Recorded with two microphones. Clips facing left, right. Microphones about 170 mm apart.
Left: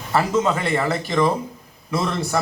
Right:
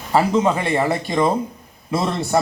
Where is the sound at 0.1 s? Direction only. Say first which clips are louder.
Right 3 dB; 20° right (ahead or behind).